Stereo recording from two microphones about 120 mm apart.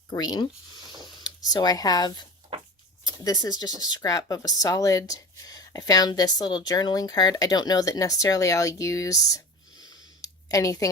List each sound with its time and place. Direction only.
0.1 s speech: 35° left (ahead or behind)
10.2 s clicking: 30° left (ahead or behind)